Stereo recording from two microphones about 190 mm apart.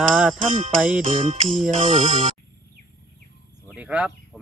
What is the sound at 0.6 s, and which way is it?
Music, 40° right (ahead or behind).